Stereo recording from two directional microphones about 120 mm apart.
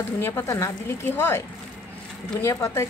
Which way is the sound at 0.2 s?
20° left (ahead or behind).